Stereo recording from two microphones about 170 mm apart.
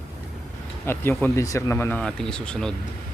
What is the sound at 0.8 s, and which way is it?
Speech, 15° left (ahead or behind).